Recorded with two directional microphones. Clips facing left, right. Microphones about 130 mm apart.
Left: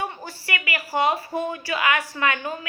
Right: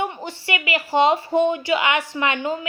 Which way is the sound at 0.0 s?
20° right (ahead or behind).